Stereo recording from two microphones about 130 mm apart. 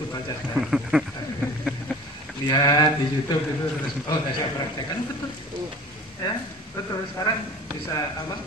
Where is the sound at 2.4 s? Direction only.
30° left (ahead or behind).